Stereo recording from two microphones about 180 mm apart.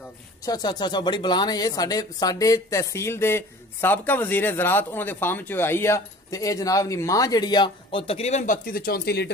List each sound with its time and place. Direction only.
0.4 s speech: 20° left (ahead or behind); by 9.3 s 65° left (ahead or behind)